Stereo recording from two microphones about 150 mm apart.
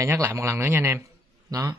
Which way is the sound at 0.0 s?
15° right (ahead or behind).